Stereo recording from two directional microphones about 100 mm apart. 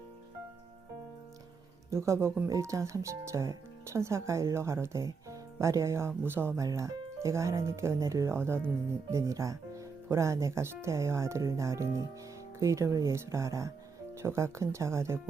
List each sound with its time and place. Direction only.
1.9 s speech: 30° right (ahead or behind)
6.6 s speech: 35° right (ahead or behind)